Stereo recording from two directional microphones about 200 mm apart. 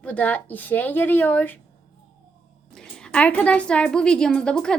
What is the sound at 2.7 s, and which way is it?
A woman's voice, 5° left (ahead or behind).